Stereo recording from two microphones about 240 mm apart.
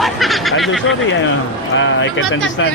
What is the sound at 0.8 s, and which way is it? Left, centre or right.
Speech, left.